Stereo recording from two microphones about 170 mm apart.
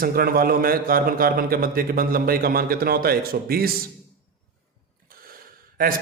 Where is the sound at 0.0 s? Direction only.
60° right (ahead or behind).